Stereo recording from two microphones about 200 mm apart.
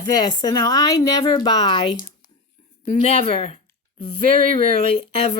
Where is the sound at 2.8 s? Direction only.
35° left (ahead or behind).